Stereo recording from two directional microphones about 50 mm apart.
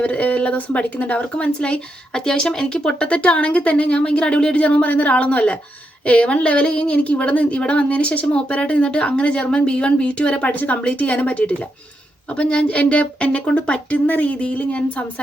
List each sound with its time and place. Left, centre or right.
0.0 s speech: left